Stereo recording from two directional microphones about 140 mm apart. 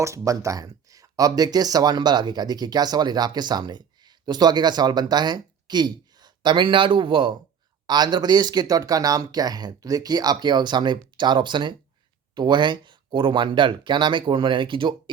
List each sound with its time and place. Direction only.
0.0 s speech: 20° right (ahead or behind)